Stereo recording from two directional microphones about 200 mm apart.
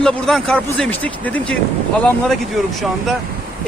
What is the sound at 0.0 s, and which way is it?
Speech, centre (ahead or behind).